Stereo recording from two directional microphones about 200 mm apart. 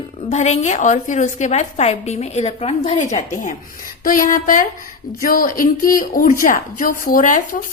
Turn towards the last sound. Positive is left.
turn(degrees=40)  # may be behind; listen again after turning